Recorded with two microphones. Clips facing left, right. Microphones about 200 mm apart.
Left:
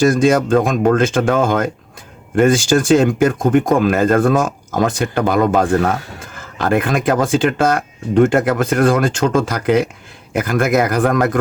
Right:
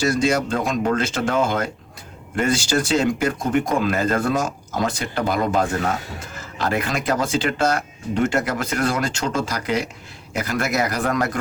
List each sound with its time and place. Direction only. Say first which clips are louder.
0.0 s speech: left 7 dB; 50° left (ahead or behind)